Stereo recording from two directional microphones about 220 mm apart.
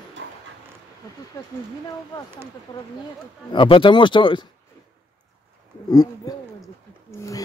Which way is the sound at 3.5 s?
20° left (ahead or behind).